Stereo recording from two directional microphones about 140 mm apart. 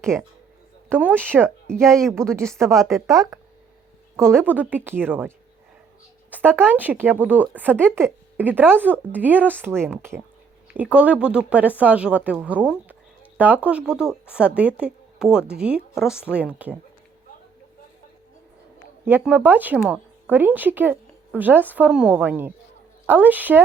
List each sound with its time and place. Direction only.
0.0 s speech: 5° left (ahead or behind)
0.9 s speech: 15° right (ahead or behind)
1.5 s speech: 5° left (ahead or behind)
2.1 s speech: 20° right (ahead or behind)
2.7 s speech: centre (ahead or behind)
3.1 s speech: 25° right (ahead or behind)
6.3 s speech: 15° right (ahead or behind)
19.2 s speech: 15° right (ahead or behind)